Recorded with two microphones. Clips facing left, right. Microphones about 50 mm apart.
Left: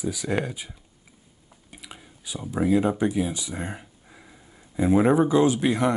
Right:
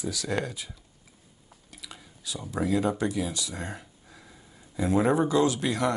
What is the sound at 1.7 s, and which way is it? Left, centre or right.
Speech, left.